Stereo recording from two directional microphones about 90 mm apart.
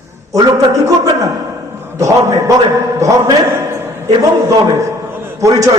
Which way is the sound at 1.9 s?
35° right (ahead or behind).